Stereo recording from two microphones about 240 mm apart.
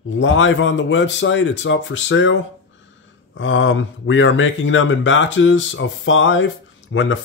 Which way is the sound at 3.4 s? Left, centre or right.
Left.